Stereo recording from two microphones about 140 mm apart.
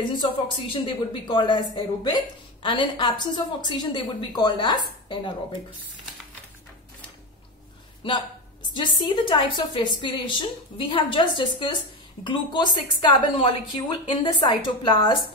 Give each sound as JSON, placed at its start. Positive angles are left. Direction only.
{"t": 0.0, "sound": "a woman's voice", "side_deg": 35}
{"t": 8.0, "sound": "a woman's voice", "side_deg": 35}